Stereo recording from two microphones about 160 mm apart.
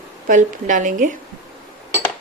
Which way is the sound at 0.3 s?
55° right (ahead or behind).